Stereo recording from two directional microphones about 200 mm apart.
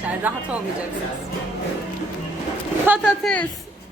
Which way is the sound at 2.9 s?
Centre (ahead or behind).